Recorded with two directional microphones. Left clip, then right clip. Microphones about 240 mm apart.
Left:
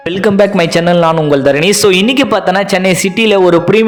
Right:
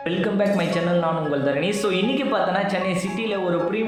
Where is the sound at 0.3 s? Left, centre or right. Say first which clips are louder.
Left 13 dB; left.